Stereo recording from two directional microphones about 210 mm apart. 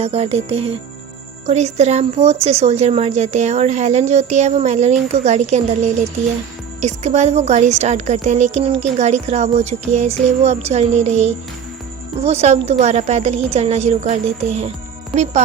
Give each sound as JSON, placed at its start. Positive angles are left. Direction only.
{"t": 0.0, "sound": "a woman's voice", "side_deg": -30}